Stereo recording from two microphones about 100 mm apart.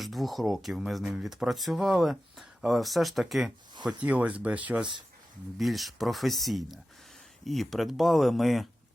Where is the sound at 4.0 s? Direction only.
15° right (ahead or behind).